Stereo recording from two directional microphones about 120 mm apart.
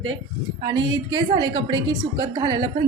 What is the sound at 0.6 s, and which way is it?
A woman's voice, 40° right (ahead or behind).